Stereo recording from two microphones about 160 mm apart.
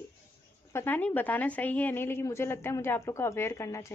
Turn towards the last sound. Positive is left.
turn(degrees=20)  # may be behind; listen again after turning